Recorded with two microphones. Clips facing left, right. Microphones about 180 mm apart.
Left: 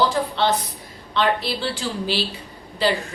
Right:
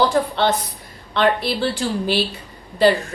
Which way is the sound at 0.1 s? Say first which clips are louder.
Right 3 dB; 55° right (ahead or behind).